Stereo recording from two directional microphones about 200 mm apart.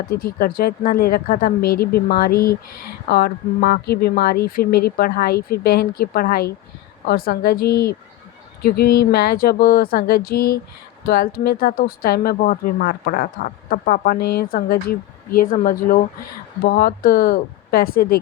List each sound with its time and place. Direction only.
0.1 s speech: 50° left (ahead or behind)